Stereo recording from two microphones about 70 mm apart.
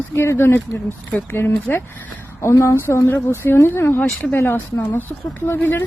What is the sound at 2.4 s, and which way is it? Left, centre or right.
A woman's voice, left.